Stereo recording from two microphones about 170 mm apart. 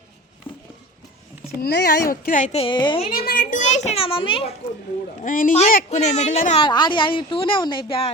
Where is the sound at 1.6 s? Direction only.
70° left (ahead or behind); by 3.1 s 30° left (ahead or behind).